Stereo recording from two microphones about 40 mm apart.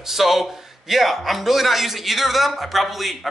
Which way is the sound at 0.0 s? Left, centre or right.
Centre.